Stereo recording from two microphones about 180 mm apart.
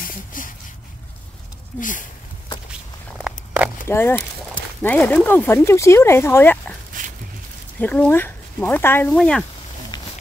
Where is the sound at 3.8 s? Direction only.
15° left (ahead or behind).